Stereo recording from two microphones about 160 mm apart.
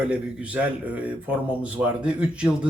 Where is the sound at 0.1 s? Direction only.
10° right (ahead or behind).